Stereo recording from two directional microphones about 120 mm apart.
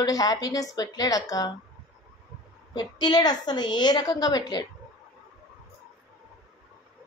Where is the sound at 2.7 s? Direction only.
35° left (ahead or behind).